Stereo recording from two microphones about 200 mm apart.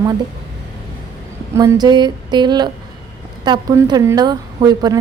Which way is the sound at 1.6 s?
20° right (ahead or behind).